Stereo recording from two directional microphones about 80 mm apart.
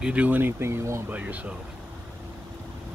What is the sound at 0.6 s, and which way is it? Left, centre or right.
Speech, right.